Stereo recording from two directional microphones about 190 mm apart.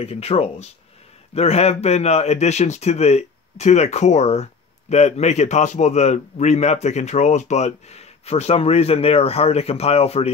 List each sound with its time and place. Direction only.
0.0 s a man's voice: 30° left (ahead or behind)